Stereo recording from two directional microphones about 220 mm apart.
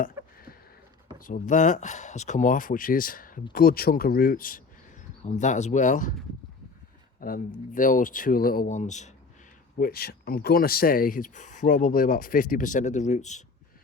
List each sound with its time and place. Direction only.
0.0 s a sound: 40° left (ahead or behind)
1.3 s speech: 35° left (ahead or behind)
7.2 s speech: 40° left (ahead or behind)
9.7 s speech: 45° left (ahead or behind)